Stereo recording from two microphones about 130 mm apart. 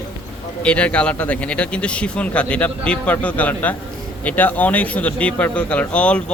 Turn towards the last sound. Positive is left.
turn(degrees=10)  # may be behind; listen again after turning